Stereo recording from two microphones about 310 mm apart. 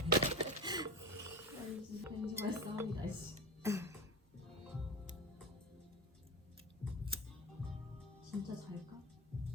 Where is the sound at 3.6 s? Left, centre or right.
Centre.